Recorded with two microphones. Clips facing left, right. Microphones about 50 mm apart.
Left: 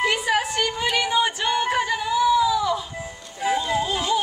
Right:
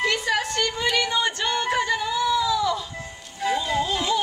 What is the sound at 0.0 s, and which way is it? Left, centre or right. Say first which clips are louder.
Music: left 2 dB; centre.